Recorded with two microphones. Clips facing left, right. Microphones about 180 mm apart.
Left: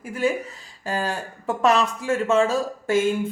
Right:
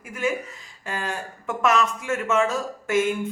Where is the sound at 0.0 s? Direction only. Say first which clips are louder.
Left 3 dB; 35° left (ahead or behind).